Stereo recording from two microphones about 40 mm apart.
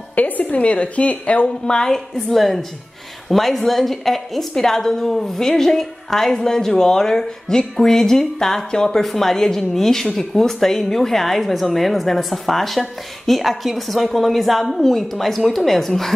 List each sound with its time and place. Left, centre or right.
0.1 s a woman's voice: left; by 2.2 s centre
2.3 s a woman's voice: centre